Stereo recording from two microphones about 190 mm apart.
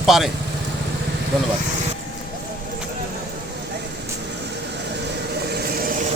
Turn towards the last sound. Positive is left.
turn(degrees=-45)  # may be behind; listen again after turning